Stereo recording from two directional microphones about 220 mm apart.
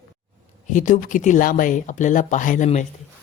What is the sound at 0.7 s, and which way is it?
Speech, 35° left (ahead or behind).